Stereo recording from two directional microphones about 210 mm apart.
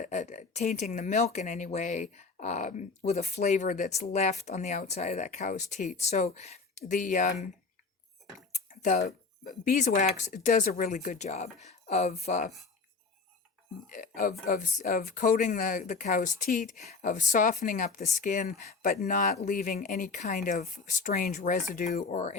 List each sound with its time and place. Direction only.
0.0 s speech: 35° left (ahead or behind)
8.8 s speech: 35° left (ahead or behind)
13.9 s speech: 40° left (ahead or behind)